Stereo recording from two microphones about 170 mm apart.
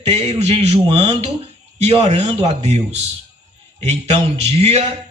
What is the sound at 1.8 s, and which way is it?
A man's voice, 35° right (ahead or behind).